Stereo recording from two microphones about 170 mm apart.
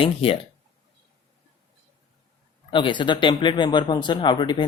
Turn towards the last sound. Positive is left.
turn(degrees=25)  # may be behind; listen again after turning